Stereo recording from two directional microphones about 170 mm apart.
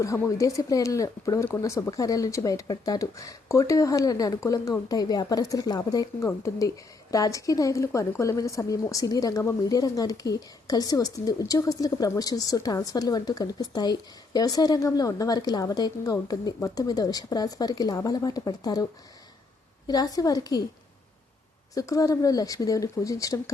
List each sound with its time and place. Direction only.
0.0 s a woman's voice: 20° left (ahead or behind)
19.9 s a woman's voice: 20° left (ahead or behind)
21.8 s a woman's voice: 20° left (ahead or behind)